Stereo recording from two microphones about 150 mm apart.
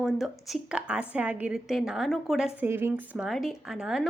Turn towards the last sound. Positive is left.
turn(degrees=-5)  # may be behind; listen again after turning